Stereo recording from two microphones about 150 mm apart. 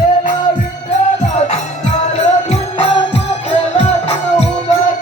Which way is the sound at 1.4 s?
50° left (ahead or behind).